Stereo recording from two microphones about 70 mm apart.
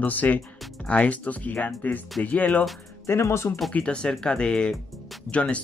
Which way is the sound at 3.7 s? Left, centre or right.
Centre.